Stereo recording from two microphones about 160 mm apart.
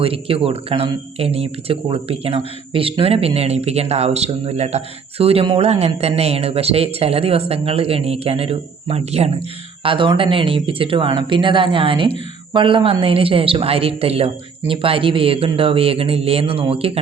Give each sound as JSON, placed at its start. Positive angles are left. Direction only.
{"t": 0.0, "sound": "speech", "side_deg": -35}